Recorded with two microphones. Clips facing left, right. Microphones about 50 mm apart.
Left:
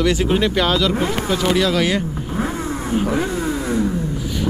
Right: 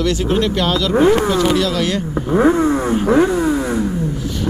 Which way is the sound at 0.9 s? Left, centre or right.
Centre.